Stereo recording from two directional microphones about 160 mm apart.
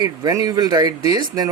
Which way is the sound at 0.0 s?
25° right (ahead or behind).